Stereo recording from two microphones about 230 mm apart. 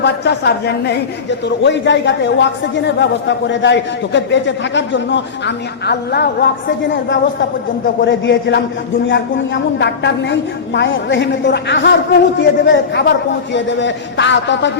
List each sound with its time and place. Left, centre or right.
0.0 s speech: left
9.7 s speech: left